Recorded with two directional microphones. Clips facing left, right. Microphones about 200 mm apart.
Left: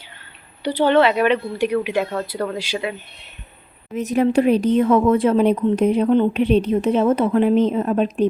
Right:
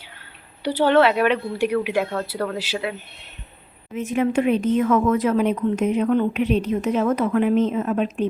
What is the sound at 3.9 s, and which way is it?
Speech, 40° left (ahead or behind).